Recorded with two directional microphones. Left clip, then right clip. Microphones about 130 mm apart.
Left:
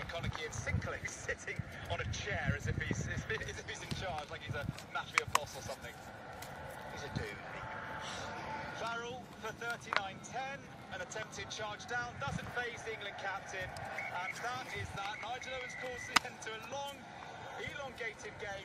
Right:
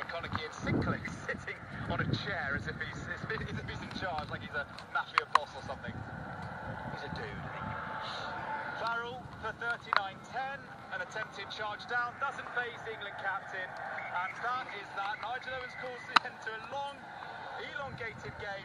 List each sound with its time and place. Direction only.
0.0 s a sound: 35° left (ahead or behind)
1.9 s speech: 35° left (ahead or behind)
7.2 s speech: 40° left (ahead or behind)